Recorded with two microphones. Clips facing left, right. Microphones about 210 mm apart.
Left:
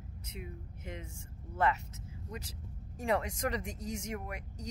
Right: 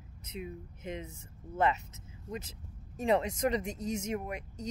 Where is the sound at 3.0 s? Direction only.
20° right (ahead or behind).